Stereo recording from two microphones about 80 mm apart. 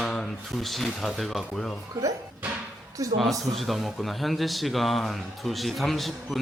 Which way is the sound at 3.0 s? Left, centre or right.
Right.